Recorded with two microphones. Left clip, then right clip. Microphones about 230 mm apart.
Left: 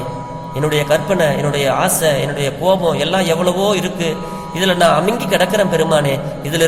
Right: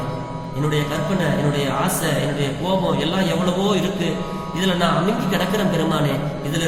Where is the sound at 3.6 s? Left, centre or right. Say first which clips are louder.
Left 5 dB; left.